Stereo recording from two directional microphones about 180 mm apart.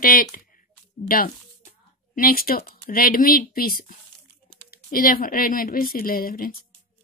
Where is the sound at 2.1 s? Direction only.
55° left (ahead or behind).